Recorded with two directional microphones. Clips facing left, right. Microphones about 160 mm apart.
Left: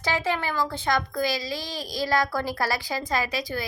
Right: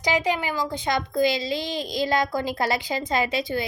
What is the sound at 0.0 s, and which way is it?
A child's voice, 15° right (ahead or behind).